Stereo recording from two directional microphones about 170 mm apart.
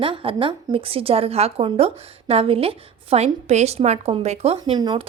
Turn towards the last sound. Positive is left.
turn(degrees=-25)  # may be behind; listen again after turning